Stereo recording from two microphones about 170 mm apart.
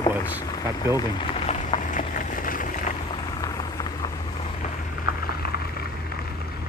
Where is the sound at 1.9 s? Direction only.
55° left (ahead or behind).